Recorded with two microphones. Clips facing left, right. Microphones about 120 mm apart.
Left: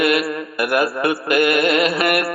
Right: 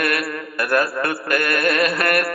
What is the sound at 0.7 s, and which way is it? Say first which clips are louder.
A man's voice: left 2 dB; 15° left (ahead or behind).